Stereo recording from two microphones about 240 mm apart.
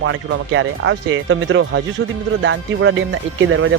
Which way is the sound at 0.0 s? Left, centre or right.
Right.